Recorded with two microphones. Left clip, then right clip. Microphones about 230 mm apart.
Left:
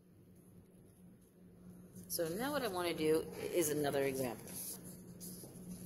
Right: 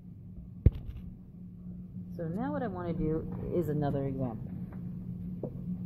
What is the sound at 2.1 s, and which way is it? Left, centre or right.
Speech, left.